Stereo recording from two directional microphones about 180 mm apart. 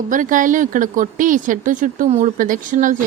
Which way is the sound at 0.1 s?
45° right (ahead or behind).